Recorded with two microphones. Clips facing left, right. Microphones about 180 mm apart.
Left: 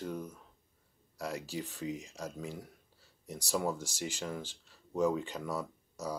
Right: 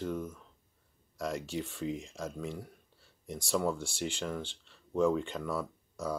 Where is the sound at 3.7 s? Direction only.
40° left (ahead or behind).